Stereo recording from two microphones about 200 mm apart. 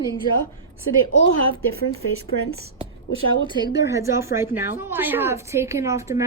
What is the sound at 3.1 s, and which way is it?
A woman's voice, 25° right (ahead or behind).